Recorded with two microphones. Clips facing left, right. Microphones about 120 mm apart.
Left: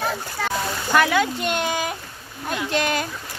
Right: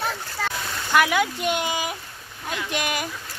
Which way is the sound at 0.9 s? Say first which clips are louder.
Left 1 dB; 10° right (ahead or behind).